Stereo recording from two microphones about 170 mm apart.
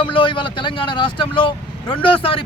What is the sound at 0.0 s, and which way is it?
Speech, 30° left (ahead or behind).